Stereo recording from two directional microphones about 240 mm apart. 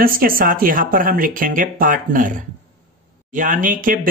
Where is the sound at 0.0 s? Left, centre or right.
Right.